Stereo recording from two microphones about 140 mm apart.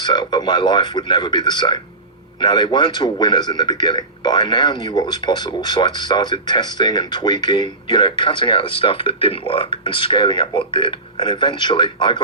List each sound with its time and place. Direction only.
0.0 s a man's voice: 35° left (ahead or behind)